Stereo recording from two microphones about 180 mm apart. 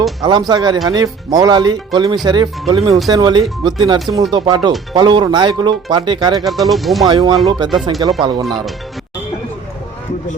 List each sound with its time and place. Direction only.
0.2 s speech: 25° right (ahead or behind)
6.4 s speech: centre (ahead or behind)
7.0 s speech: 25° right (ahead or behind)
8.4 s speech: centre (ahead or behind)